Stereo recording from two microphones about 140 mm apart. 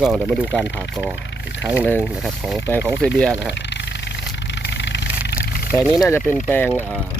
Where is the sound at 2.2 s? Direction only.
Centre (ahead or behind).